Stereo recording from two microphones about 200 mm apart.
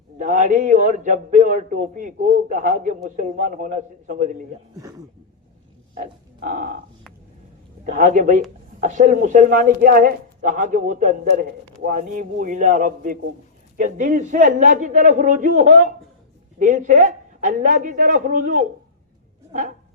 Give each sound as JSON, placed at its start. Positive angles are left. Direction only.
{"t": 0.2, "sound": "a man's voice", "side_deg": -40}
{"t": 4.8, "sound": "speech", "side_deg": -15}
{"t": 5.9, "sound": "a sound", "side_deg": -45}
{"t": 7.9, "sound": "a man's voice", "side_deg": -40}